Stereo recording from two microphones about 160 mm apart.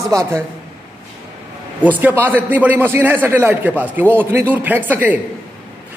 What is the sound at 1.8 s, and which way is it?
A man's voice, 10° right (ahead or behind).